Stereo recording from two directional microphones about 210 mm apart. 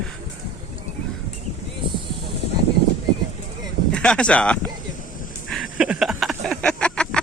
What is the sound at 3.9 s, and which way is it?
Speech, 5° left (ahead or behind).